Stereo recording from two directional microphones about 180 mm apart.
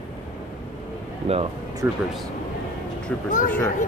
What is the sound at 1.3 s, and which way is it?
Speech, 35° right (ahead or behind).